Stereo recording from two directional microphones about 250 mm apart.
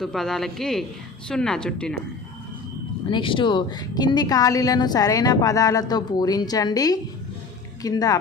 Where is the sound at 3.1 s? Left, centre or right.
Centre.